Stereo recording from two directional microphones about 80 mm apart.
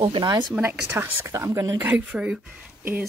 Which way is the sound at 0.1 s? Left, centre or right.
Right.